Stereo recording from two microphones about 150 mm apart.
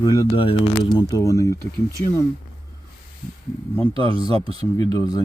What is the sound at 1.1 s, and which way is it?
Speech, 20° left (ahead or behind).